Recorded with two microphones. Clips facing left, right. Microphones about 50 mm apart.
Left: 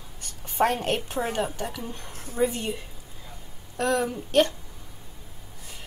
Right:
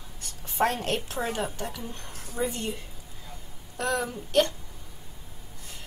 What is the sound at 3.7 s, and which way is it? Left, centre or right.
Speech, centre.